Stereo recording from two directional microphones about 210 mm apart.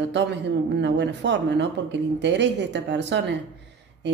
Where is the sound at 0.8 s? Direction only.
55° right (ahead or behind).